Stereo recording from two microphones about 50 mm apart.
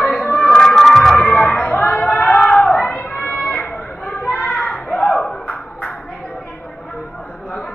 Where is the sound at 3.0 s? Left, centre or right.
Centre.